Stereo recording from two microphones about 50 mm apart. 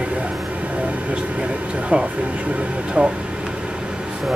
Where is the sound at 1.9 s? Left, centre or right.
Right.